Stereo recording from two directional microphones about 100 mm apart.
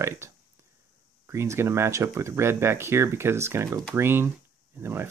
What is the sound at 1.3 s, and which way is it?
Speech, 25° right (ahead or behind).